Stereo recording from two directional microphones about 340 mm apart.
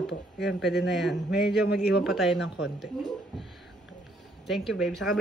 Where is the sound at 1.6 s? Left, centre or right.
Left.